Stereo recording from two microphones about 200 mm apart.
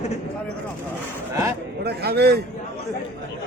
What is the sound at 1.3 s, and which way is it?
Speech, 15° right (ahead or behind).